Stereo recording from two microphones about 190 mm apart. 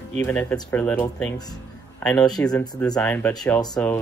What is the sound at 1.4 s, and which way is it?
Music, 20° left (ahead or behind).